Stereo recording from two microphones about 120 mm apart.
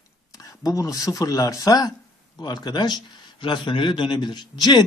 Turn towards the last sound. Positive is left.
turn(degrees=40)  # may be behind; listen again after turning